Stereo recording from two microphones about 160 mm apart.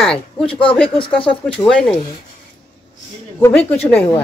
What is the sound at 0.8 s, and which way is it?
Speech, 35° left (ahead or behind).